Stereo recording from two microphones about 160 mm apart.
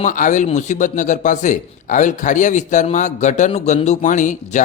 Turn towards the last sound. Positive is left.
turn(degrees=50)  # may be behind; listen again after turning